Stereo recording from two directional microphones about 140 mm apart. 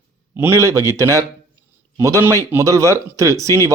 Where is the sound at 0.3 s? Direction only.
20° right (ahead or behind).